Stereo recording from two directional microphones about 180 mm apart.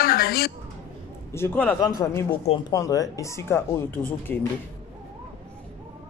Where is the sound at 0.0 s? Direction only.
55° left (ahead or behind).